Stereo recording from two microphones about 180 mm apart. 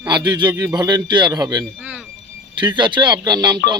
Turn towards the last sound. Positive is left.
turn(degrees=-25)  # may be behind; listen again after turning